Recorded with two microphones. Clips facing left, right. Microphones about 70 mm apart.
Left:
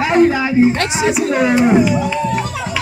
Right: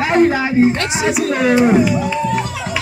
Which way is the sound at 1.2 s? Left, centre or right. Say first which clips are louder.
Right 1 dB; centre.